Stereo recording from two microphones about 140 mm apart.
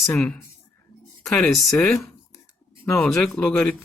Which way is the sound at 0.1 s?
10° left (ahead or behind).